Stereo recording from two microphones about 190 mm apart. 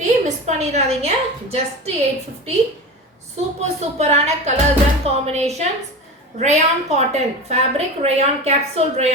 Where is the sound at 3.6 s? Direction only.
35° right (ahead or behind).